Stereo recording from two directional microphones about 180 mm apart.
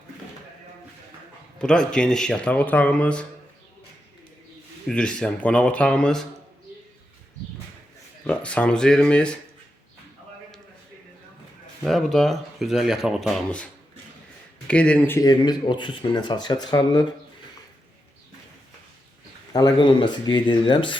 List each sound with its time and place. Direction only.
1.5 s speech: 5° left (ahead or behind)
4.9 s speech: 5° left (ahead or behind)
8.3 s speech: 5° left (ahead or behind)
11.8 s speech: centre (ahead or behind)
14.7 s speech: 5° left (ahead or behind); by 17.1 s 20° left (ahead or behind)
19.5 s speech: 25° left (ahead or behind)